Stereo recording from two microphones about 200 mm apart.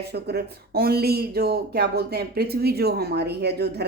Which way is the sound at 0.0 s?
55° right (ahead or behind).